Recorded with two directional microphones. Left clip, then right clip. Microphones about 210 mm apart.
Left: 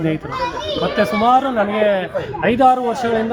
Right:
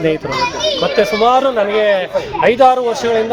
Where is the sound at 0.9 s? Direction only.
15° right (ahead or behind).